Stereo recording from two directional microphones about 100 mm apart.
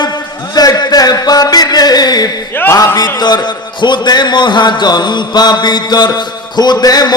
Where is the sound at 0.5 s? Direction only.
40° left (ahead or behind).